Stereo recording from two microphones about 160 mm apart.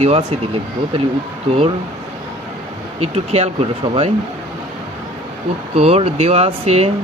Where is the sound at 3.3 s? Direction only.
40° right (ahead or behind).